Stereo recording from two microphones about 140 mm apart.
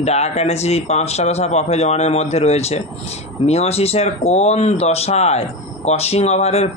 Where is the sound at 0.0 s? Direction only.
50° left (ahead or behind).